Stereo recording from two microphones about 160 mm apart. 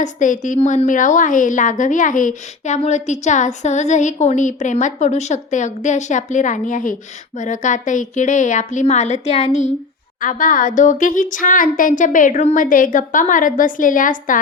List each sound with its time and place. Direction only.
0.0 s a woman's voice: 50° left (ahead or behind)
10.2 s speech: 55° left (ahead or behind)